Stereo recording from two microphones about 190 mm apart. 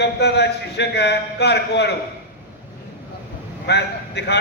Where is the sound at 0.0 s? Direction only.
60° left (ahead or behind).